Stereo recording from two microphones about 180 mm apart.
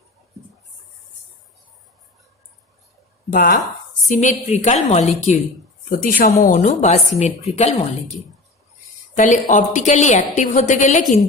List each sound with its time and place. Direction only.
3.3 s a woman's voice: 50° left (ahead or behind)
5.9 s a woman's voice: 50° left (ahead or behind)
9.1 s a woman's voice: 45° left (ahead or behind)